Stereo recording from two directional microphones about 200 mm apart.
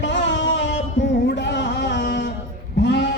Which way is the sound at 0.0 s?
65° left (ahead or behind).